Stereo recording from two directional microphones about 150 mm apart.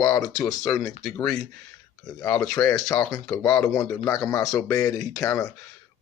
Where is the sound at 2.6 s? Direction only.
20° left (ahead or behind).